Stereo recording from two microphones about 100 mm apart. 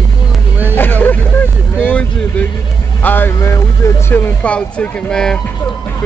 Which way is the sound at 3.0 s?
20° left (ahead or behind).